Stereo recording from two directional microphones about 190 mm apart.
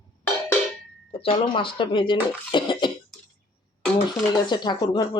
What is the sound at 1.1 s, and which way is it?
A woman's voice, 30° left (ahead or behind).